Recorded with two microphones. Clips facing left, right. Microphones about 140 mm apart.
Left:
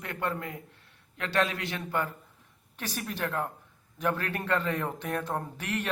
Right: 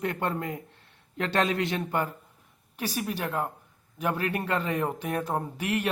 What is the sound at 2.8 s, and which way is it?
Speech, 10° right (ahead or behind).